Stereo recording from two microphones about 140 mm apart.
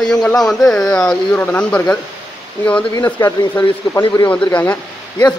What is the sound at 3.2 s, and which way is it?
Speech, 25° left (ahead or behind).